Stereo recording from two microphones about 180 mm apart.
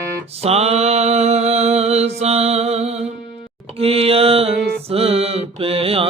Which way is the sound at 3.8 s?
35° right (ahead or behind).